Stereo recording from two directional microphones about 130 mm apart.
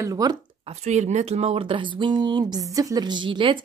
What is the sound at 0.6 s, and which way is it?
Speech, 60° right (ahead or behind).